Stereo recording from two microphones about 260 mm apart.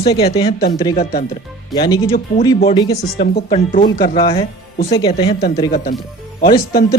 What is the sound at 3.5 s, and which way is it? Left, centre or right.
Speech, left.